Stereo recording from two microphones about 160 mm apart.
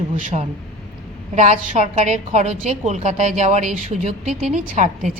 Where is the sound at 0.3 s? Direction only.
40° right (ahead or behind).